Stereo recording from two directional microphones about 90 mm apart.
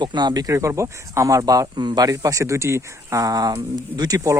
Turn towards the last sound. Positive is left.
turn(degrees=-50)  # may be behind; listen again after turning